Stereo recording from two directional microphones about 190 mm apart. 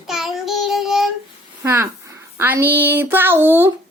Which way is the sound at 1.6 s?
15° right (ahead or behind).